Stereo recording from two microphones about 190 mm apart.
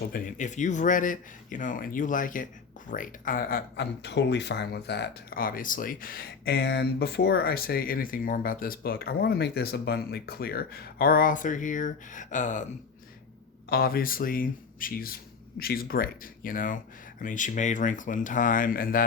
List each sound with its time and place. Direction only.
0.1 s speech: 40° left (ahead or behind)
13.7 s speech: 55° left (ahead or behind)